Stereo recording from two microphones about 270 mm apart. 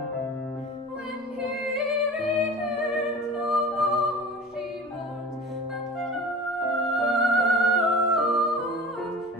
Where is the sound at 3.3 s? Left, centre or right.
Centre.